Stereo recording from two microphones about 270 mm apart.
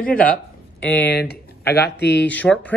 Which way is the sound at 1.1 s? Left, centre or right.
Left.